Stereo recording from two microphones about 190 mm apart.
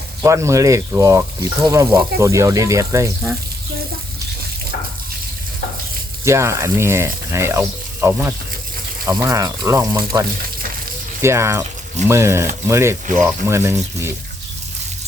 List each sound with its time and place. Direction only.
0.2 s speech: 15° right (ahead or behind)
6.2 s speech: 15° right (ahead or behind)